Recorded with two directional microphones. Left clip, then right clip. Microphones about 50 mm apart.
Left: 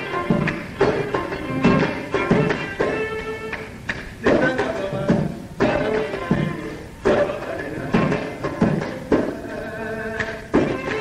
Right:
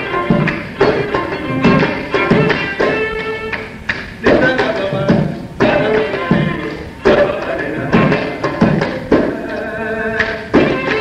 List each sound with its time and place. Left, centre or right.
0.3 s music: left
2.1 s music: centre
4.2 s thump: left
4.6 s music: centre
5.6 s music: left
7.0 s a sound: centre
7.9 s music: left
8.4 s music: centre